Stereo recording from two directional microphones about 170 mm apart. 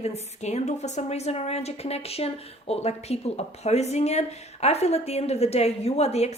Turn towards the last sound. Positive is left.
turn(degrees=40)  # may be behind; listen again after turning